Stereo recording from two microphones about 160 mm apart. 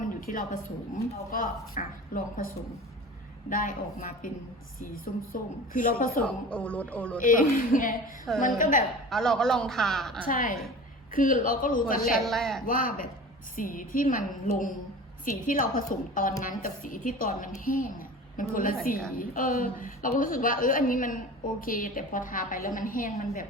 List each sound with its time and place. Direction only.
0.0 s a sound: 60° left (ahead or behind)
1.1 s a woman's voice: 60° left (ahead or behind)
3.5 s a woman's voice: 60° left (ahead or behind)
5.3 s a woman's voice: 60° left (ahead or behind)
6.2 s speech: 10° left (ahead or behind)
7.2 s a woman's voice: 55° left (ahead or behind)
9.0 s a man's voice: centre (ahead or behind)
10.2 s a woman's voice: 60° left (ahead or behind)
12.2 s a man's voice: centre (ahead or behind)
12.6 s a woman's voice: 60° left (ahead or behind)